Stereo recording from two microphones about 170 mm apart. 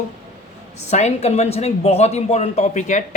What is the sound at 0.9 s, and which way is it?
Speech, 40° left (ahead or behind).